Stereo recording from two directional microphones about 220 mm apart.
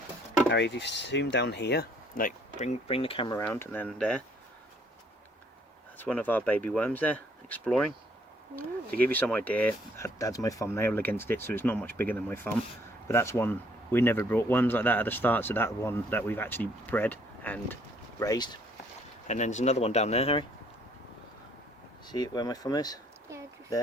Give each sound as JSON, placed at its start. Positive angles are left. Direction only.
{"t": 0.5, "sound": "speech", "side_deg": 50}
{"t": 3.3, "sound": "speech", "side_deg": 10}
{"t": 6.0, "sound": "speech", "side_deg": 5}
{"t": 19.3, "sound": "speech", "side_deg": 35}
{"t": 22.0, "sound": "speech", "side_deg": 20}
{"t": 23.3, "sound": "a sound", "side_deg": -10}